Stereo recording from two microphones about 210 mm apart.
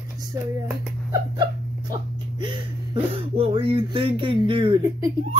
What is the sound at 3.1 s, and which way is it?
Speech, 25° right (ahead or behind).